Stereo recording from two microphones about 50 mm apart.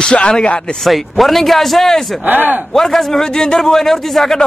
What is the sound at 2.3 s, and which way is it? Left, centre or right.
Speech, right.